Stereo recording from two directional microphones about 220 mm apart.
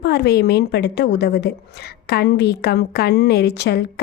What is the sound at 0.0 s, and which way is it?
A woman's voice, 45° left (ahead or behind).